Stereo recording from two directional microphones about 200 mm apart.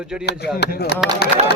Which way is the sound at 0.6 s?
55° left (ahead or behind).